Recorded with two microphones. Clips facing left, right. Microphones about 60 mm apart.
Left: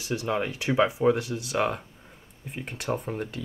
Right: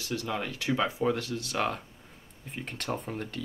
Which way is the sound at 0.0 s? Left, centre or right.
Centre.